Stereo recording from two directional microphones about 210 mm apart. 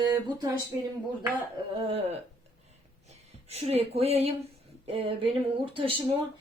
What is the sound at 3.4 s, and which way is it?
A woman's voice, 30° right (ahead or behind).